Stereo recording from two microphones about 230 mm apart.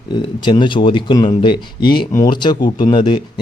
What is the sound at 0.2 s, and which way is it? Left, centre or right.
Speech, left.